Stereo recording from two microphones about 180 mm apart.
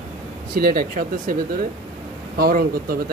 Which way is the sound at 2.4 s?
55° right (ahead or behind).